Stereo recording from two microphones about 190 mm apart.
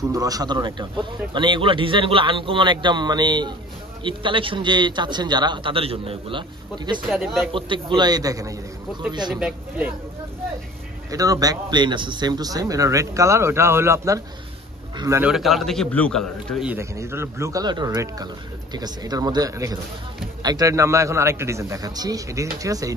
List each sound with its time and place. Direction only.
0.1 s a man's voice: 20° right (ahead or behind)
7.1 s a man's voice: centre (ahead or behind)
7.5 s a man's voice: 25° right (ahead or behind)
9.3 s a man's voice: 5° right (ahead or behind)
11.1 s a man's voice: 20° right (ahead or behind)
15.3 s a man's voice: centre (ahead or behind)
16.7 s a man's voice: 15° right (ahead or behind)